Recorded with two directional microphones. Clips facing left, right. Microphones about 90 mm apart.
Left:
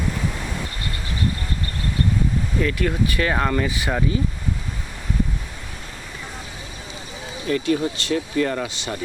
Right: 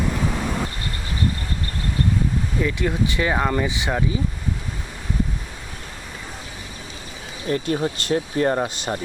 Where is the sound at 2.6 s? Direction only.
15° right (ahead or behind).